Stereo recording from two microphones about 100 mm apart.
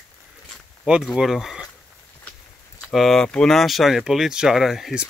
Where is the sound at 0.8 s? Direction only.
5° right (ahead or behind).